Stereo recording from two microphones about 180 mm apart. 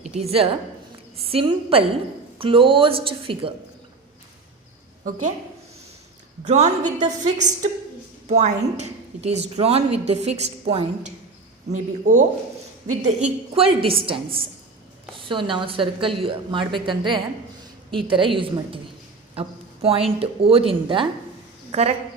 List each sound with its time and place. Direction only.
0.0 s a woman's voice: 35° right (ahead or behind)
6.5 s a woman's voice: 40° right (ahead or behind)
19.3 s a sound: 30° right (ahead or behind)
20.1 s a woman's voice: 35° right (ahead or behind)